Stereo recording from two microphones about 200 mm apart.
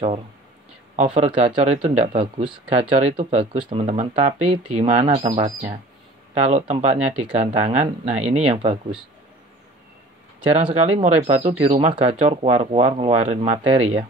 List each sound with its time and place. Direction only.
0.9 s speech: 30° right (ahead or behind)
10.6 s speech: 30° right (ahead or behind)